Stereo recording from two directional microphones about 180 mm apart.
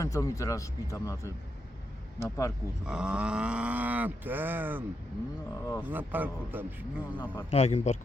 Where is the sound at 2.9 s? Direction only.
5° right (ahead or behind).